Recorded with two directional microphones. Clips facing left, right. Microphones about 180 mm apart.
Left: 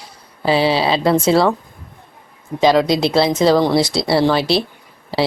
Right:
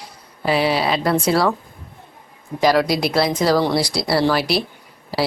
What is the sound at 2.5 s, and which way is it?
Speech, 25° left (ahead or behind).